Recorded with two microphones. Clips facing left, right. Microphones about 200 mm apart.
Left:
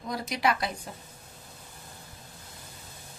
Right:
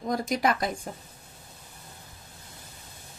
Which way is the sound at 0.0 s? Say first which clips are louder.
Right 3 dB; 45° right (ahead or behind).